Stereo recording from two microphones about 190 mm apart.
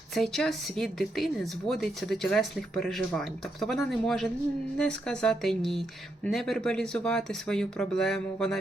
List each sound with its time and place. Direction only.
0.1 s speech: centre (ahead or behind)